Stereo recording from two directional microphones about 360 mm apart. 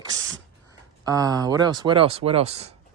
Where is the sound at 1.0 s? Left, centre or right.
Centre.